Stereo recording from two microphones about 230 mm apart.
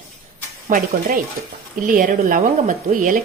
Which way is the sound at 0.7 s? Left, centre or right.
Right.